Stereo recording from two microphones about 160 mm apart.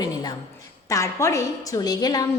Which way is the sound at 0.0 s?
25° left (ahead or behind).